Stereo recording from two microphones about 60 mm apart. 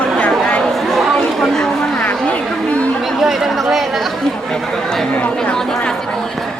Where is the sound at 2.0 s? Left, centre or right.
Left.